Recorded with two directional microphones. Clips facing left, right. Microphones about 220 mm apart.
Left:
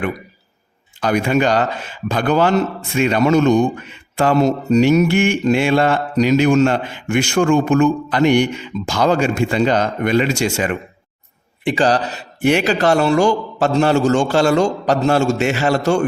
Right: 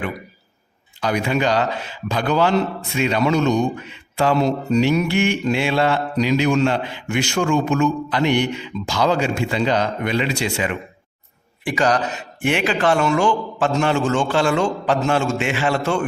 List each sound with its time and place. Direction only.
1.0 s a man's voice: 50° left (ahead or behind)
11.6 s a man's voice: 30° left (ahead or behind)